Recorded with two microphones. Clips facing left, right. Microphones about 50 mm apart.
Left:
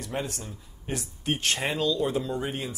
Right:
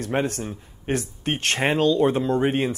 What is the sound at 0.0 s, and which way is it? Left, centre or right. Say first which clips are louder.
Speech: right 8 dB; right.